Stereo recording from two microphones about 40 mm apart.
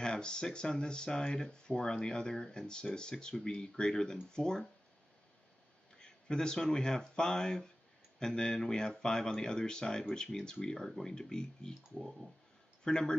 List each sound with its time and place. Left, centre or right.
0.0 s speech: left
5.9 s speech: centre
12.0 s speech: centre
12.8 s speech: centre